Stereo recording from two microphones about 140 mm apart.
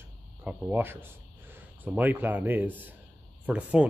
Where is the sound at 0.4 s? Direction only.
10° right (ahead or behind).